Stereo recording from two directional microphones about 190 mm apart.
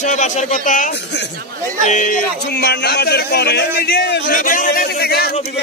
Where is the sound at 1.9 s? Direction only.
45° left (ahead or behind); by 4.2 s 60° left (ahead or behind).